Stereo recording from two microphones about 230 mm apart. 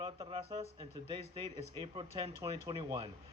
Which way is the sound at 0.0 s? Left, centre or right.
Right.